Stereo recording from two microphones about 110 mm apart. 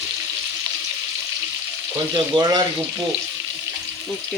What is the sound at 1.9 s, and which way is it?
Frying, 40° right (ahead or behind).